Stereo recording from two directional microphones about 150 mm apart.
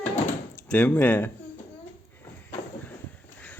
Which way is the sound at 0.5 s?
10° left (ahead or behind).